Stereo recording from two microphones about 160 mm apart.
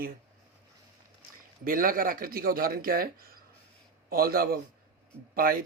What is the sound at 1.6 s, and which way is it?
Speech, 60° right (ahead or behind).